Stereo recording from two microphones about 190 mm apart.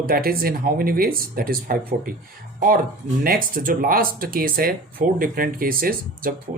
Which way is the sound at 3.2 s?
50° right (ahead or behind).